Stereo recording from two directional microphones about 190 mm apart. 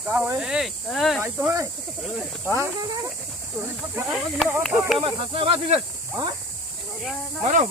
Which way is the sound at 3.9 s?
5° right (ahead or behind).